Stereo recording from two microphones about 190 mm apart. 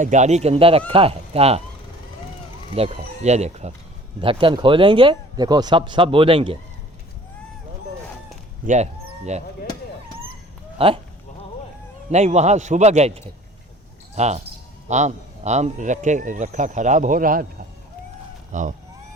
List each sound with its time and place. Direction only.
0.0 s speech: 40° right (ahead or behind)
2.7 s speech: 35° right (ahead or behind)
8.6 s speech: 40° right (ahead or behind)
10.8 s speech: 30° right (ahead or behind)
12.1 s speech: 35° right (ahead or behind)
18.5 s speech: 40° right (ahead or behind)